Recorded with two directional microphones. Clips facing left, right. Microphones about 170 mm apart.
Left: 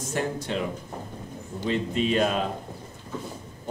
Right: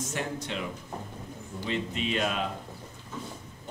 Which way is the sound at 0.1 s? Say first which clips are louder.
Left 5 dB; 40° left (ahead or behind).